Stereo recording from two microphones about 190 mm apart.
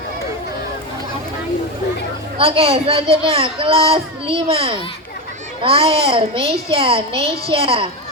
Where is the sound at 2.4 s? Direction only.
30° right (ahead or behind).